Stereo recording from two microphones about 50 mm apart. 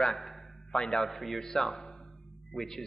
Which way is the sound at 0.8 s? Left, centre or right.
Centre.